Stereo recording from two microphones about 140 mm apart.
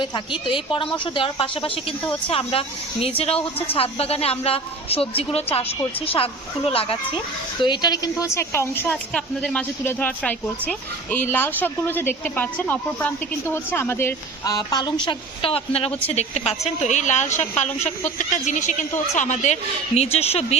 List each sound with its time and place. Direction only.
0.0 s speech: 35° left (ahead or behind)
7.6 s a woman's voice: 30° left (ahead or behind)
14.4 s a woman's voice: 25° left (ahead or behind); by 19.5 s 60° left (ahead or behind)
20.0 s speech: 45° left (ahead or behind)